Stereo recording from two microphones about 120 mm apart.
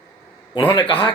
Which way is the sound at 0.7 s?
45° left (ahead or behind).